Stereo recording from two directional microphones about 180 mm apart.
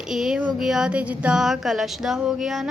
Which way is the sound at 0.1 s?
5° right (ahead or behind).